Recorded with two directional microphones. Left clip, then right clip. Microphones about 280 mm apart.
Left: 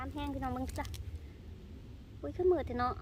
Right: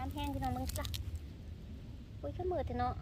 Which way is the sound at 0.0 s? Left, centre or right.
Centre.